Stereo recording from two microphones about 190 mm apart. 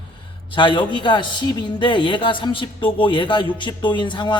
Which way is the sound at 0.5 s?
25° left (ahead or behind).